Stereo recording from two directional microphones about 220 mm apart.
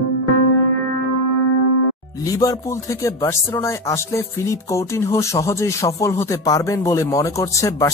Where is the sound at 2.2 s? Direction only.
15° left (ahead or behind).